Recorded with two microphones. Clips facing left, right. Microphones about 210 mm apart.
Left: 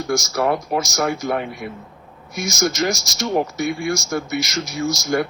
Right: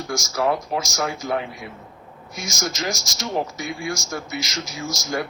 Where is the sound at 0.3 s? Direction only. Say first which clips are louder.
Even; 60° left (ahead or behind).